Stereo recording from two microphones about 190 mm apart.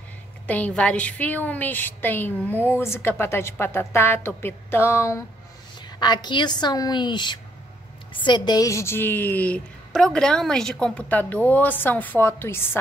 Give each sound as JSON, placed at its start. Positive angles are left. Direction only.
{"t": 0.5, "sound": "a woman's voice", "side_deg": 10}